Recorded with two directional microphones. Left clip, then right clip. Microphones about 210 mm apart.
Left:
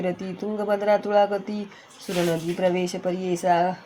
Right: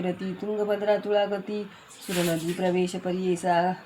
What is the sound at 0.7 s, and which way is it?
Speech, 35° left (ahead or behind).